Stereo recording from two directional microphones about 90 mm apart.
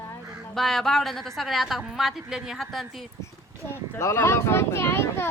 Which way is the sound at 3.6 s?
25° left (ahead or behind).